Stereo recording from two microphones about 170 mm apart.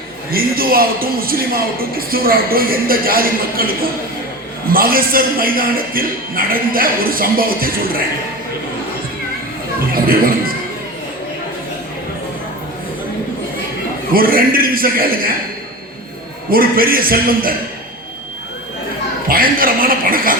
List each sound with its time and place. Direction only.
0.3 s a man's voice: 60° right (ahead or behind)
4.7 s a man's voice: 60° right (ahead or behind)
9.9 s speech: 60° right (ahead or behind)
14.1 s a man's voice: 60° right (ahead or behind)
16.5 s a man's voice: 60° right (ahead or behind)
19.3 s a man's voice: 55° right (ahead or behind)